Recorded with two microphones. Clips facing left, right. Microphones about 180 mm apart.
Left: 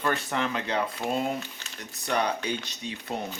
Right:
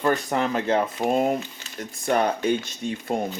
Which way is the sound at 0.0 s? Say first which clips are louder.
Right 5 dB; 40° right (ahead or behind).